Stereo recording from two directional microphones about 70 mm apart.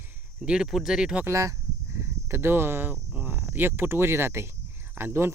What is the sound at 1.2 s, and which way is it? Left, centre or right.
Speech, right.